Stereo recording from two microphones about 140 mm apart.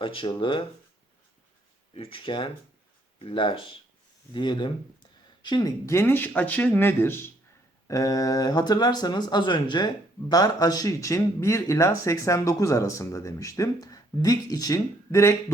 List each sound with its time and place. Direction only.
0.0 s speech: 35° left (ahead or behind)
1.9 s speech: 40° left (ahead or behind); by 15.4 s 20° left (ahead or behind)